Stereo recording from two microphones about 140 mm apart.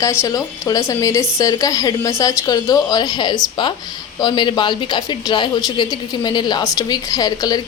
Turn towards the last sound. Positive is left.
turn(degrees=25)  # may be behind; listen again after turning